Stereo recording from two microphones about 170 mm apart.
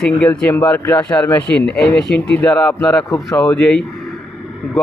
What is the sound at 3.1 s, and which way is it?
Speech, 20° left (ahead or behind).